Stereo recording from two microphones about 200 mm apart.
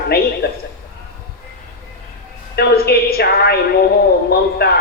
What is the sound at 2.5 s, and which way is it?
A man's voice, 50° left (ahead or behind).